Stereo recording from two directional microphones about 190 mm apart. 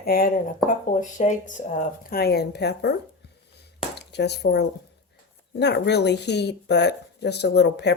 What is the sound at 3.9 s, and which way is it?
A woman's voice, 60° left (ahead or behind).